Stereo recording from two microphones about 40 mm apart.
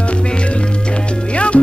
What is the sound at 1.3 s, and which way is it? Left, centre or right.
Music, left.